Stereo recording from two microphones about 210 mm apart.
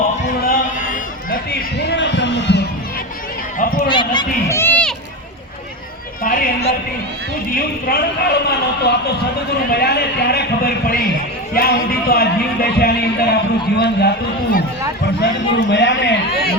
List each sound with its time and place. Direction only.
0.4 s run: 45° left (ahead or behind)
3.6 s a sound: 45° left (ahead or behind)
3.8 s run: 20° left (ahead or behind); by 4.9 s 5° left (ahead or behind)
6.2 s a sound: 40° left (ahead or behind)
7.9 s a man's voice: 50° left (ahead or behind)
15.2 s a man's voice: 55° left (ahead or behind)